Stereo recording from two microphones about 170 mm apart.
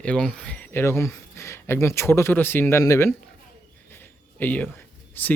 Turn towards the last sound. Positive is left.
turn(degrees=10)  # may be behind; listen again after turning